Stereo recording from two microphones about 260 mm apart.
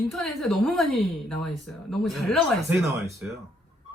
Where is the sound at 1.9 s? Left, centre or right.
Centre.